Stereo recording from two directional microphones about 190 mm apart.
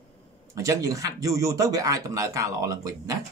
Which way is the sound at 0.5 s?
15° right (ahead or behind).